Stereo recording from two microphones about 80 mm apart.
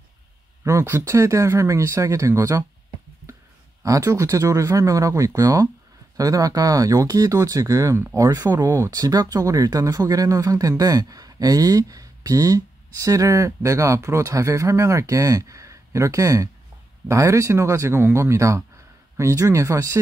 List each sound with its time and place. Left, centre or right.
0.7 s speech: right
3.8 s speech: right